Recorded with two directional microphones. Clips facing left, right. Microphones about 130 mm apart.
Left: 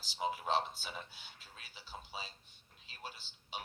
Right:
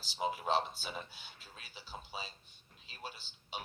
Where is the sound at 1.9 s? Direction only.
25° right (ahead or behind).